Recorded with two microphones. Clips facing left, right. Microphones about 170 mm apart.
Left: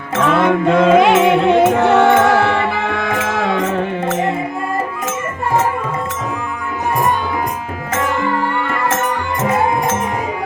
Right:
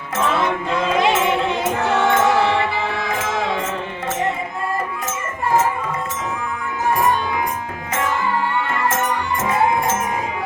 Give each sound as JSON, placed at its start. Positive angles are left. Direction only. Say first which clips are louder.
{"t": 0.2, "sound": "music", "louder": "left 6 dB", "side_deg": 55}